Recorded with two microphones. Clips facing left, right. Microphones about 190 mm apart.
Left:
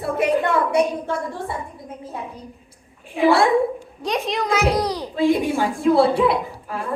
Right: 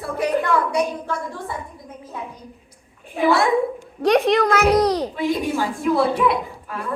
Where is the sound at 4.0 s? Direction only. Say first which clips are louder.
Right 8 dB; 65° right (ahead or behind).